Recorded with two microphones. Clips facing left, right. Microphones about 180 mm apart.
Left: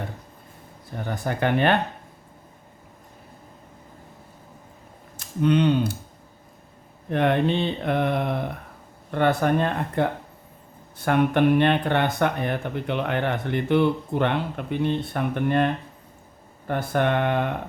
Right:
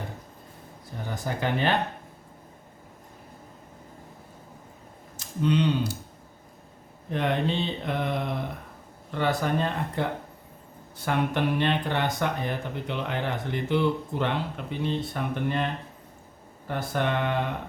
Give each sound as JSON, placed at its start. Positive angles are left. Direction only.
{"t": 0.9, "sound": "speech", "side_deg": 60}
{"t": 5.1, "sound": "speech", "side_deg": 60}
{"t": 7.1, "sound": "speech", "side_deg": 60}
{"t": 16.9, "sound": "speech", "side_deg": 55}